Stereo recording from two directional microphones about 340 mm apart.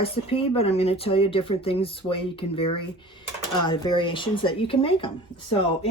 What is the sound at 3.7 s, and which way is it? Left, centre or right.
Speech, centre.